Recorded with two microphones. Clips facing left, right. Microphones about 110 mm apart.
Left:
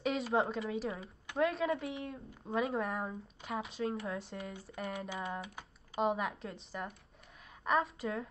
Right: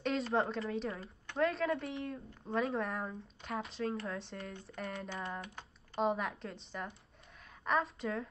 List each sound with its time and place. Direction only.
0.0 s a woman's voice: 5° left (ahead or behind)